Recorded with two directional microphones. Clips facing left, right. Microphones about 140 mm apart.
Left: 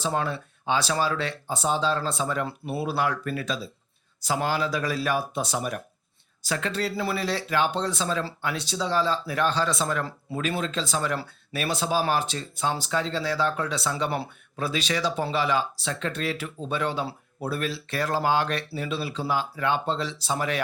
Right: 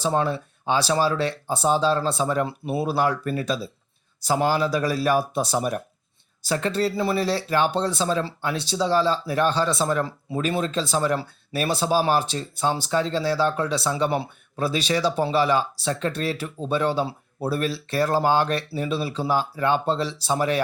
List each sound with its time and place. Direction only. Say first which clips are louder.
0.0 s speech: right 4 dB; 30° right (ahead or behind)